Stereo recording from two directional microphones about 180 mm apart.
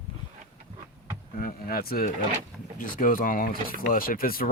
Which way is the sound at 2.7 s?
50° left (ahead or behind).